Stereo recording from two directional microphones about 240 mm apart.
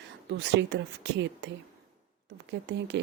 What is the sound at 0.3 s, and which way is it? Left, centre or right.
Speech, right.